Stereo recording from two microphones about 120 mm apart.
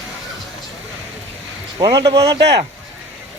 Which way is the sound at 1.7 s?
30° right (ahead or behind).